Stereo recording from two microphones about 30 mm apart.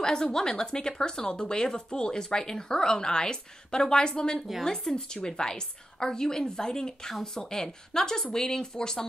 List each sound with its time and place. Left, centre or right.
0.0 s speech: left